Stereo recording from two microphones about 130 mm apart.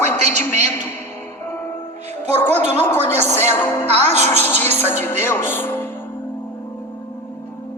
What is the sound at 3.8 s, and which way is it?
Speech, 55° right (ahead or behind).